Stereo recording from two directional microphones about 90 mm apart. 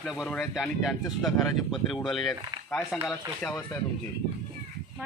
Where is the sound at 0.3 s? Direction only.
5° left (ahead or behind).